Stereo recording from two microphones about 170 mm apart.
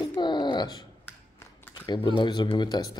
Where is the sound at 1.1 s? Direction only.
10° left (ahead or behind).